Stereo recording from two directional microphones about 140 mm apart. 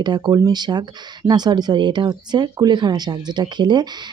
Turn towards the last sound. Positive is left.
turn(degrees=-30)  # may be behind; listen again after turning